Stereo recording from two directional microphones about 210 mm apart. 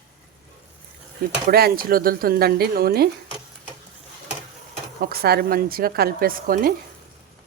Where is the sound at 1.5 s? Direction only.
45° right (ahead or behind).